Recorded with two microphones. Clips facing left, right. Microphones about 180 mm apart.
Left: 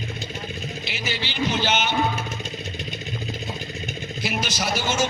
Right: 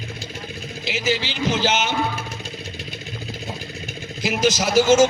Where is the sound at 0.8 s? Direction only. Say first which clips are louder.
Right 10 dB; 90° right.